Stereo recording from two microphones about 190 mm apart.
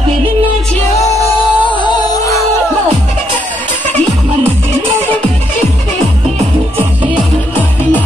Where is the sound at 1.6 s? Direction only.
25° left (ahead or behind).